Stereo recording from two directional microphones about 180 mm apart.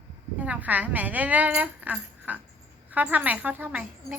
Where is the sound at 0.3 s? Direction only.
10° right (ahead or behind).